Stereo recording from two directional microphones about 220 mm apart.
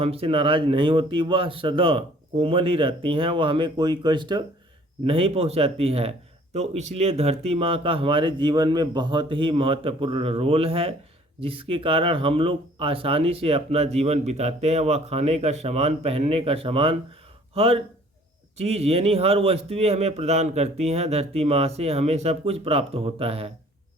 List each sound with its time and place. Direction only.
0.0 s speech: 25° right (ahead or behind)